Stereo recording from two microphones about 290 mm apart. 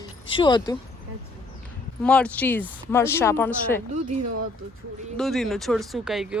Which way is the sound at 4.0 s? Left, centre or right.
Right.